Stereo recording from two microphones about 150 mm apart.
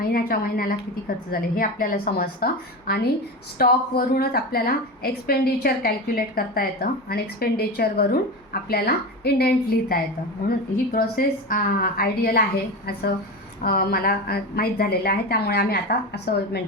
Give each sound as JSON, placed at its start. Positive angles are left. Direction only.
{"t": 0.0, "sound": "a woman's voice", "side_deg": 85}
{"t": 9.9, "sound": "a woman's voice", "side_deg": 75}